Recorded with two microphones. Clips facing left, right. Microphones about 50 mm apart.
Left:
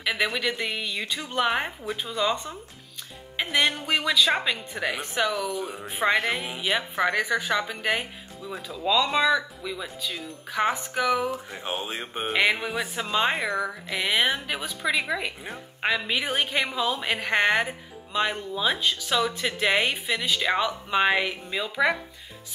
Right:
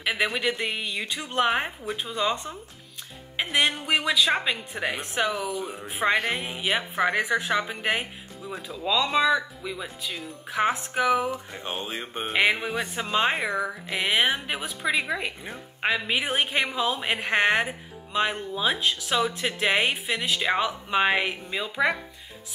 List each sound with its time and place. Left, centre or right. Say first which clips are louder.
0.0 s speech: even; centre
3.3 s music: even; centre
3.9 s speech: even; centre
5.5 s speech: even; centre
11.3 s speech: left 1 dB; centre
12.3 s speech: even; centre
12.5 s speech: even; centre